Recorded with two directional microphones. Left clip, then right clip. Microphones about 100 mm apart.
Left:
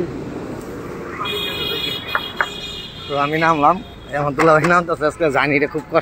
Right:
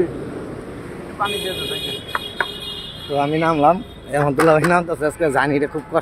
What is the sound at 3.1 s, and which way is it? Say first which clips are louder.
Speech: left 2 dB; 35° right (ahead or behind).